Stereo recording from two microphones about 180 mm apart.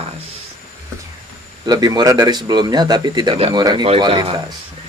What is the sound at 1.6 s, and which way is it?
Speech, 25° right (ahead or behind).